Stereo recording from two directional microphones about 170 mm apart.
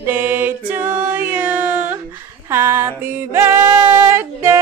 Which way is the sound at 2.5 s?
15° right (ahead or behind).